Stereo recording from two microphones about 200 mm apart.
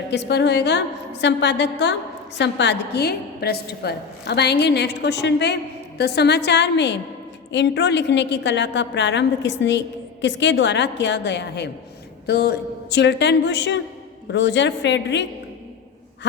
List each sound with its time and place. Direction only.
0.1 s a woman's voice: 60° left (ahead or behind)